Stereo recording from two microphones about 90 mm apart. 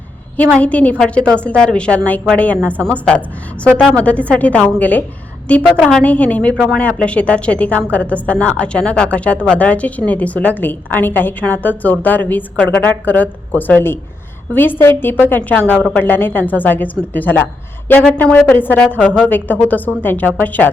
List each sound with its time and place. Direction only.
0.3 s a woman's voice: 15° left (ahead or behind)